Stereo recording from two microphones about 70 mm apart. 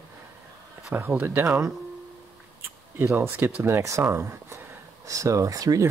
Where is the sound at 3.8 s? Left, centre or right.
Right.